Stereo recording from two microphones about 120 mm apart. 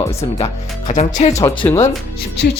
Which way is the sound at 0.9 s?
80° left.